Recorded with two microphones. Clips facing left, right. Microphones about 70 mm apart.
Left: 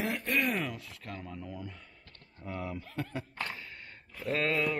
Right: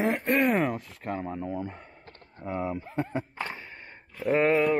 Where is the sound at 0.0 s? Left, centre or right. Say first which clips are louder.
Right 7 dB; right.